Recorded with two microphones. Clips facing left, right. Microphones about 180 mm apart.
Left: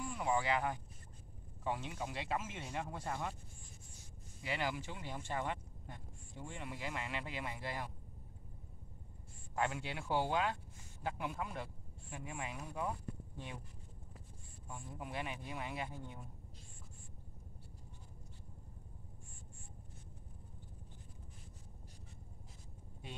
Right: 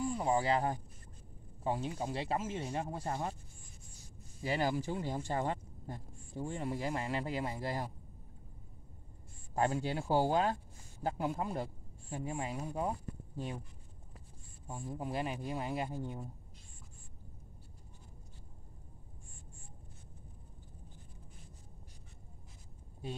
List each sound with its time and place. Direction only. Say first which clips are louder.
0.0 s speech: right 4 dB; 30° right (ahead or behind)
4.4 s speech: right 6 dB; 35° right (ahead or behind)
9.6 s speech: right 6 dB; 35° right (ahead or behind)
14.7 s speech: right 7 dB; 35° right (ahead or behind)